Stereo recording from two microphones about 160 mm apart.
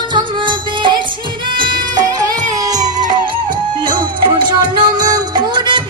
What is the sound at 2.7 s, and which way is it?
Music, 50° right (ahead or behind).